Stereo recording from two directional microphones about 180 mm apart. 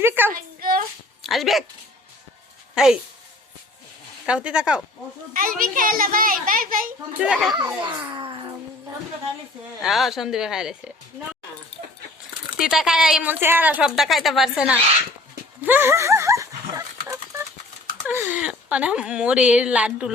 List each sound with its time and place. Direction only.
0.0 s a woman's voice: 10° right (ahead or behind)
0.6 s a sound: 50° right (ahead or behind)
1.2 s speech: centre (ahead or behind)
2.7 s speech: centre (ahead or behind)
4.3 s a woman's voice: 5° right (ahead or behind)
5.3 s a child's voice: 50° right (ahead or behind)
7.2 s a woman's voice: 5° right (ahead or behind)
7.8 s a child's voice: 20° right (ahead or behind)
9.8 s a woman's voice: centre (ahead or behind)
12.5 s a woman's voice: 5° right (ahead or behind)
15.6 s dog: 10° right (ahead or behind)
18.0 s speech: 10° right (ahead or behind)